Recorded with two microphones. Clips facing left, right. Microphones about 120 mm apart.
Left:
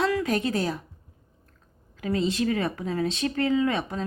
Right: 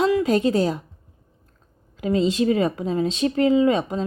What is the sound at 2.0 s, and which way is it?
Speech, 25° right (ahead or behind).